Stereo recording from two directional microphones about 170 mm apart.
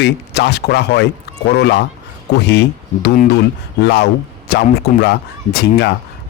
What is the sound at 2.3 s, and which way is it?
Speech, 90° left.